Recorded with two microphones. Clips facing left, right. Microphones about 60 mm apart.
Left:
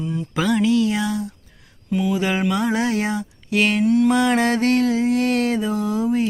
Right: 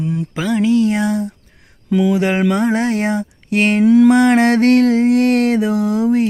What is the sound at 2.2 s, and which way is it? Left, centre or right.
Music, right.